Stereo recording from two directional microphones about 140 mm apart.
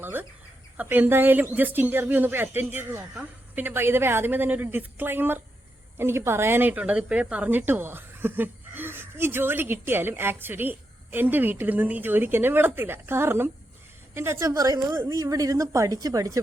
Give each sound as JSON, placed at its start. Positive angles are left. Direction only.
{"t": 0.0, "sound": "chicken", "side_deg": -15}
{"t": 0.8, "sound": "a woman's voice", "side_deg": -15}